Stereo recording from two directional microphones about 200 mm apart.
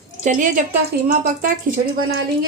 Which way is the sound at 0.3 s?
40° right (ahead or behind).